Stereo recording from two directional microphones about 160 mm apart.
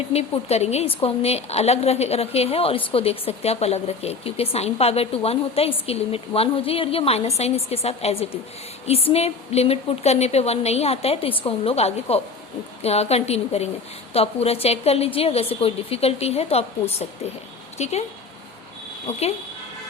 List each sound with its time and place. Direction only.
0.1 s a woman's voice: 40° left (ahead or behind)